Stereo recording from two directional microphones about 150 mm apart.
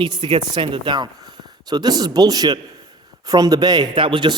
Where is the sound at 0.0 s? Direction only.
30° right (ahead or behind).